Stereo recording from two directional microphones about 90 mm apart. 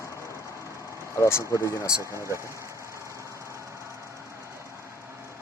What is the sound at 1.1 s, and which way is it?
Speech, 30° left (ahead or behind).